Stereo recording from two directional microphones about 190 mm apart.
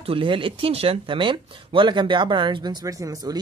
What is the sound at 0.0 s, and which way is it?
Speech, 30° right (ahead or behind).